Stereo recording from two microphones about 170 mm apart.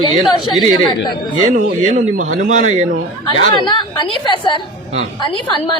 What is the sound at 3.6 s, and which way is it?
A woman's voice, 25° left (ahead or behind).